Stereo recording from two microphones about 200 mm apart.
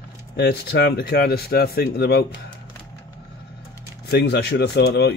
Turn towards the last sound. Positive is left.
turn(degrees=55)  # may be behind; listen again after turning